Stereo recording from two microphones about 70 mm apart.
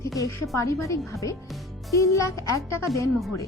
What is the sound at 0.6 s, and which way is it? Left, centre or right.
Speech, left.